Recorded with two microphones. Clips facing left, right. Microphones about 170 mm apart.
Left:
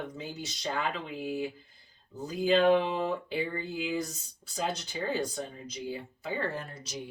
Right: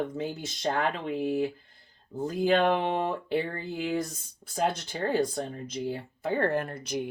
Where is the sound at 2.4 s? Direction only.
60° right (ahead or behind).